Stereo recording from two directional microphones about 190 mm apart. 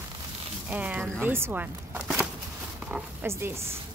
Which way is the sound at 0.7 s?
10° right (ahead or behind).